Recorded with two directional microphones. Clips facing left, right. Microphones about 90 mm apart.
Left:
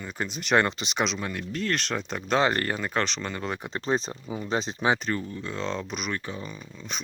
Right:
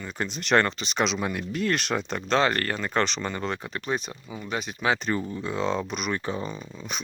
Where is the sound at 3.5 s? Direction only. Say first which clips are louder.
Even; 15° left (ahead or behind).